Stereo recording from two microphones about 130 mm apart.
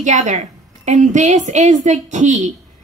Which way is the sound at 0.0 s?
65° right (ahead or behind).